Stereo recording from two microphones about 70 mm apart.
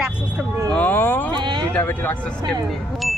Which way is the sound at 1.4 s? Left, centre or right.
Right.